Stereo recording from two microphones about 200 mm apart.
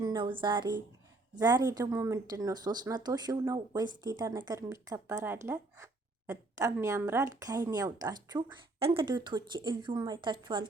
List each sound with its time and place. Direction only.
0.0 s speech: 25° right (ahead or behind)